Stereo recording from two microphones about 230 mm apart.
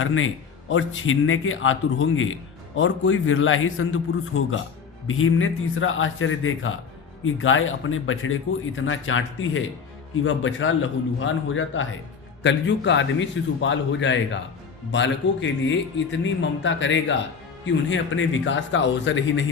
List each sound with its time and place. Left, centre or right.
0.0 s a man's voice: left